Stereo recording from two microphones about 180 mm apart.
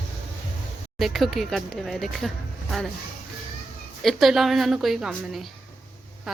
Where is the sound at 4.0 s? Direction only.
Centre (ahead or behind).